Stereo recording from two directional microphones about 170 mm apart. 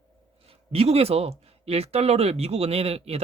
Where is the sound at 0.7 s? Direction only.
35° right (ahead or behind).